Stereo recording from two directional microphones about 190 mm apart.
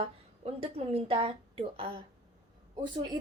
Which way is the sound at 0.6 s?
30° right (ahead or behind).